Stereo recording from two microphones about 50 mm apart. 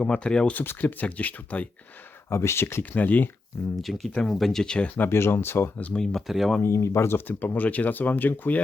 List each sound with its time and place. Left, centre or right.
0.0 s speech: centre
0.6 s speech: left
2.3 s speech: left
2.9 s speech: left
3.8 s speech: centre
4.6 s speech: centre
5.0 s speech: left
5.7 s speech: left
6.1 s speech: centre
6.7 s speech: left
7.3 s speech: left